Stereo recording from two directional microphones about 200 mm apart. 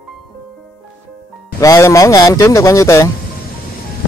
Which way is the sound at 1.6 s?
15° left (ahead or behind).